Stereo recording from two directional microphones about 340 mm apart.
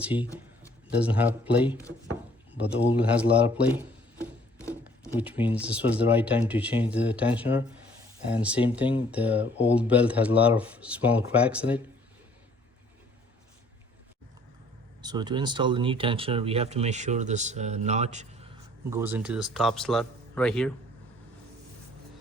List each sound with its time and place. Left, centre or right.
0.0 s speech: centre
15.0 s speech: centre
18.9 s speech: centre